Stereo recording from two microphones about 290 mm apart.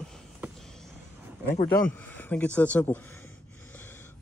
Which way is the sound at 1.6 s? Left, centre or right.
Centre.